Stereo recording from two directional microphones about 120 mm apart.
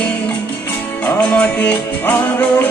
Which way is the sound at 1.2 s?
10° left (ahead or behind).